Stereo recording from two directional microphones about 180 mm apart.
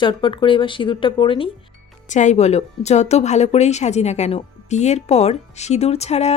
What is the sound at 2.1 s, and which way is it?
Speech, 40° left (ahead or behind).